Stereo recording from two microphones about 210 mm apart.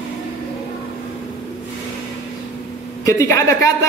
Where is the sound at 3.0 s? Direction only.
15° left (ahead or behind).